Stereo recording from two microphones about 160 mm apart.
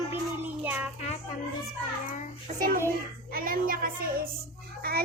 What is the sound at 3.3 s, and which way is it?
A woman's voice, 65° right (ahead or behind).